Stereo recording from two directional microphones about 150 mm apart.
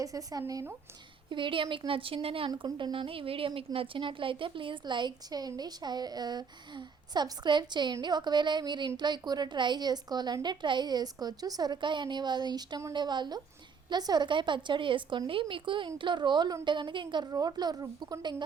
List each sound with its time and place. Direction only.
0.0 s a woman's voice: 25° right (ahead or behind)
1.3 s a woman's voice: 35° right (ahead or behind)